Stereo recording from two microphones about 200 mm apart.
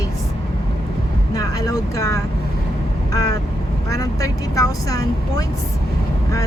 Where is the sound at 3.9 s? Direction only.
15° left (ahead or behind).